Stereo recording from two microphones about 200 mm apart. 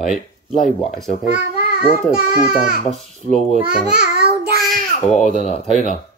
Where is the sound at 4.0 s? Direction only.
50° right (ahead or behind).